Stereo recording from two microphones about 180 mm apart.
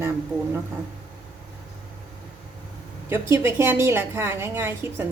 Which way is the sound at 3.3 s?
15° right (ahead or behind).